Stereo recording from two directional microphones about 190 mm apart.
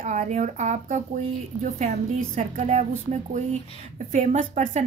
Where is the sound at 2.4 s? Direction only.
40° right (ahead or behind).